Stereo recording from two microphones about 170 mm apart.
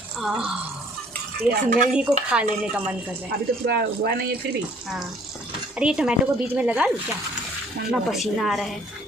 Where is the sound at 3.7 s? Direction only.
70° right (ahead or behind).